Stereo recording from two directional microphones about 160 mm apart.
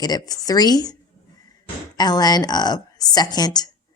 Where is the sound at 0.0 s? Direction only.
25° left (ahead or behind).